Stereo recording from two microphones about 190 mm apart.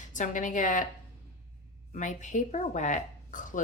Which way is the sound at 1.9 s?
40° left (ahead or behind).